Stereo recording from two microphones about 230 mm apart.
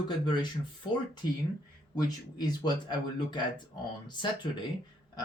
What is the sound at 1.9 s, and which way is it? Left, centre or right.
A man's voice, centre.